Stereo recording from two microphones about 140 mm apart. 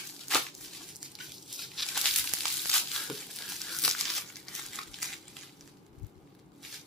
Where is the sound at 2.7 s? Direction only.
5° left (ahead or behind).